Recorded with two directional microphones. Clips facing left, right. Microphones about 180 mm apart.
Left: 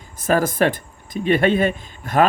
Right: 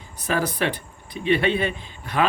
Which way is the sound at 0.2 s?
45° left (ahead or behind).